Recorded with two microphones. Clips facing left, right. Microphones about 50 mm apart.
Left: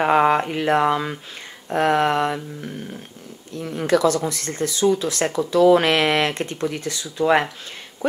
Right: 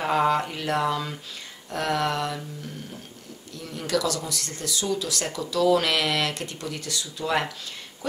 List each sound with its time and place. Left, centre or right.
0.0 s speech: left